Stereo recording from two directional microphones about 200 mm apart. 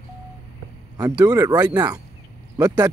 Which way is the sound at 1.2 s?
15° right (ahead or behind).